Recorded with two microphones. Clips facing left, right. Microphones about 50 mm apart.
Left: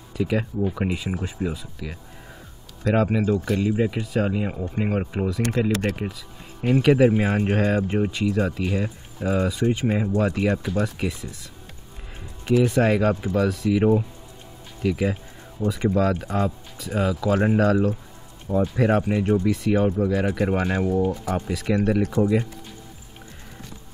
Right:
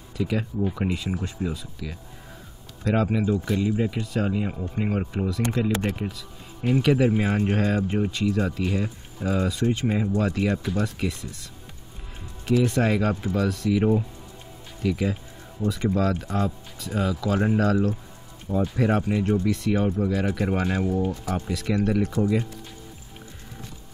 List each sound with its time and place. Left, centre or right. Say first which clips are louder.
0.1 s speech: left 3 dB; centre
5.7 s speech: left 2 dB; centre
5.9 s music: left 1 dB; centre
6.8 s speech: left 4 dB; centre
9.5 s speech: left 2 dB; centre
12.4 s speech: left 3 dB; centre
12.8 s speech: left 3 dB; centre
16.9 s speech: left 3 dB; centre
21.6 s speech: left 2 dB; left